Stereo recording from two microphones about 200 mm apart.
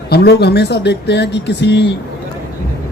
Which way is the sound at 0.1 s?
55° left (ahead or behind).